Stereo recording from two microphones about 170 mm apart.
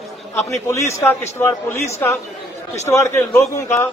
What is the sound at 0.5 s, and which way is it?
A man's voice, 15° left (ahead or behind).